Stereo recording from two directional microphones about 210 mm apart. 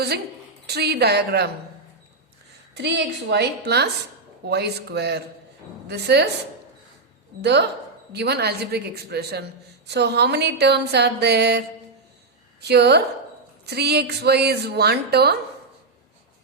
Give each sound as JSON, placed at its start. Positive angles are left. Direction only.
{"t": 0.7, "sound": "a woman's voice", "side_deg": -50}
{"t": 2.7, "sound": "a woman's voice", "side_deg": -55}
{"t": 7.4, "sound": "a woman's voice", "side_deg": -55}
{"t": 12.6, "sound": "a woman's voice", "side_deg": -50}